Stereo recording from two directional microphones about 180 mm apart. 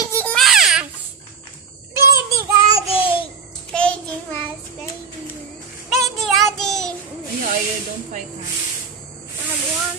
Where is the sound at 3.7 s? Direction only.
5° left (ahead or behind).